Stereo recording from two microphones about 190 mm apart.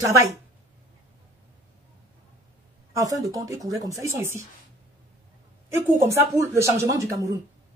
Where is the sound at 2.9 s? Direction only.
20° right (ahead or behind).